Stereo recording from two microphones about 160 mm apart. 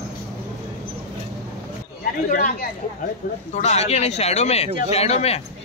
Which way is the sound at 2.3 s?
55° left (ahead or behind).